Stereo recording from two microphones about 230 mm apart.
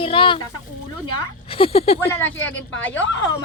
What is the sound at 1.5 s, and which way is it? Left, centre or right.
Speech, left.